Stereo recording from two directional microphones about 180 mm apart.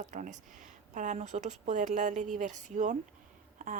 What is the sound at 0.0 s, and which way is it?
A woman's voice, 45° right (ahead or behind).